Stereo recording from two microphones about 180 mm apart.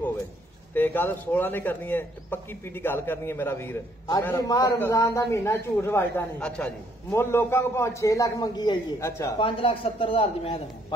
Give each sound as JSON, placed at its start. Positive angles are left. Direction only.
{"t": 0.7, "sound": "a man's voice", "side_deg": 10}